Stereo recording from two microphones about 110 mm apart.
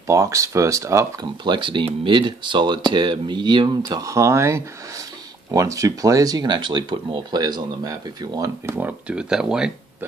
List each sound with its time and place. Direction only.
0.0 s speech: 30° right (ahead or behind)
1.4 s speech: 45° right (ahead or behind)
8.7 s speech: 15° right (ahead or behind)